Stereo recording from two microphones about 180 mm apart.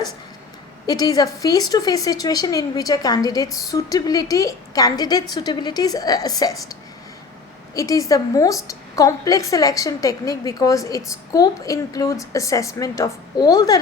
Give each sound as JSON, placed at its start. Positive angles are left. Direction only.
{"t": 0.9, "sound": "a woman's voice", "side_deg": 20}
{"t": 7.8, "sound": "a woman's voice", "side_deg": 20}